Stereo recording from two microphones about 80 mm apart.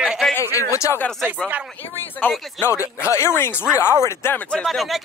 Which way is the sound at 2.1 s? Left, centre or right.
Centre.